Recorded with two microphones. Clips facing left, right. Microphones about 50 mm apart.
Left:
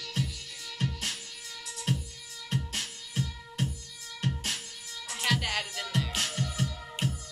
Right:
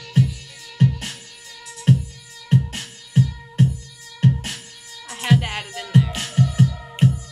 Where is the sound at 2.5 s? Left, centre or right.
Right.